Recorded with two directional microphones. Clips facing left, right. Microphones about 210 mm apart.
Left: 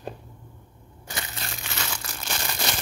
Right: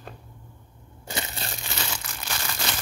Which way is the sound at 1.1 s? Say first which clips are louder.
Right 3 dB; 30° right (ahead or behind).